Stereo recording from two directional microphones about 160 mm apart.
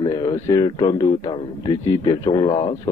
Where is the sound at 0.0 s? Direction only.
25° left (ahead or behind).